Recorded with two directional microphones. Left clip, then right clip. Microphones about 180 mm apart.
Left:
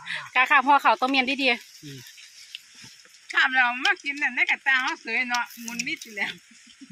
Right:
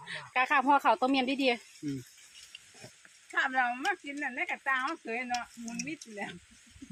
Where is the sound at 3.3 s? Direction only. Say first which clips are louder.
Left 8 dB; 35° right (ahead or behind).